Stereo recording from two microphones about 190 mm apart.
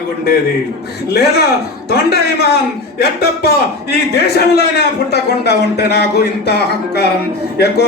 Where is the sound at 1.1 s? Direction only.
55° left (ahead or behind).